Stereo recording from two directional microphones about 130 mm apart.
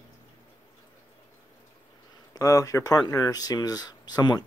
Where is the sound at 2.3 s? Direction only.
25° left (ahead or behind).